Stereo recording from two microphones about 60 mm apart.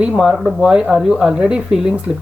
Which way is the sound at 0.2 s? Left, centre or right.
Centre.